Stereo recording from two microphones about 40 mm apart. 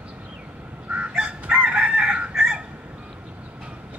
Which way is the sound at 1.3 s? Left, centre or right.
Right.